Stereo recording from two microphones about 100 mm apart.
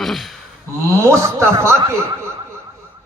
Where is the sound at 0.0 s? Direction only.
Centre (ahead or behind).